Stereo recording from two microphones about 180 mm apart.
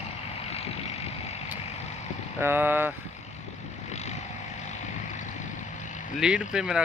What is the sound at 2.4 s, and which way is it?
Speech, 10° right (ahead or behind).